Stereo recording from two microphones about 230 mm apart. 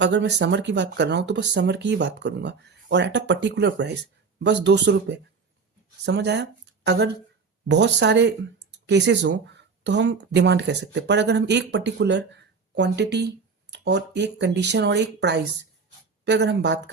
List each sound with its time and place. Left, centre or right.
0.0 s speech: right